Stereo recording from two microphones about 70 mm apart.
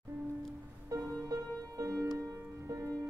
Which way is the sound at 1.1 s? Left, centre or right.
Right.